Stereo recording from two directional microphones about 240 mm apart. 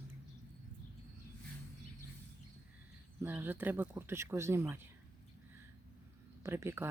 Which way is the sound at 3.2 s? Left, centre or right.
Centre.